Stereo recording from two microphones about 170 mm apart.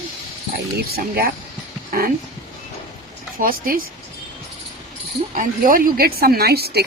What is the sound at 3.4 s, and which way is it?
Speech, 55° right (ahead or behind).